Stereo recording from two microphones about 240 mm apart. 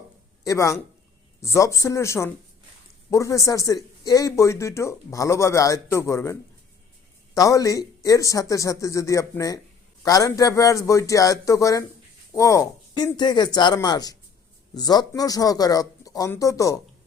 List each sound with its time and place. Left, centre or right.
0.4 s speech: centre
7.3 s speech: centre